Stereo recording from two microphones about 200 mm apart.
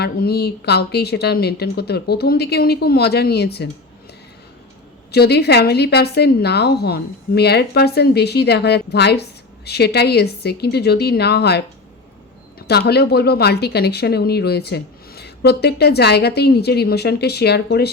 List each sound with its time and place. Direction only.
0.0 s a woman's voice: 50° left (ahead or behind)
5.1 s a woman's voice: 55° left (ahead or behind)